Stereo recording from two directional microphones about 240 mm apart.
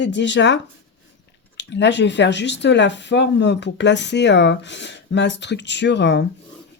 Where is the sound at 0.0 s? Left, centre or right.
Left.